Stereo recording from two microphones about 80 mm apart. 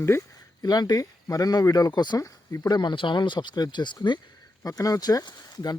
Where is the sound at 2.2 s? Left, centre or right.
Left.